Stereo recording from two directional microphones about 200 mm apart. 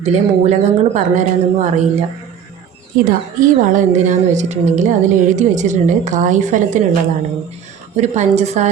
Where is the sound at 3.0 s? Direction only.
40° right (ahead or behind).